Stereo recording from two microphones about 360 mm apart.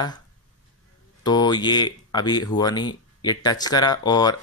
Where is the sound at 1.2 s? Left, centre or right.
Centre.